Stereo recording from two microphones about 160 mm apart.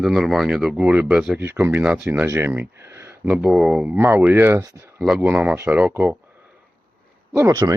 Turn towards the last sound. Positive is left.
turn(degrees=-20)  # may be behind; listen again after turning